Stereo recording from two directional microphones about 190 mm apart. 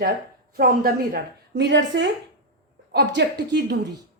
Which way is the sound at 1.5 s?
70° right (ahead or behind).